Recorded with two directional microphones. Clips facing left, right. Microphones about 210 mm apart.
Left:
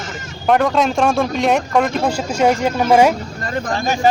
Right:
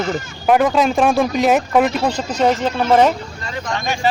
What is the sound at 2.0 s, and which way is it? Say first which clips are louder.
Speech: left 1 dB; 10° left (ahead or behind).